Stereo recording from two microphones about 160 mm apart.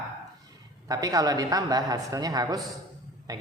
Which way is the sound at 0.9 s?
25° right (ahead or behind).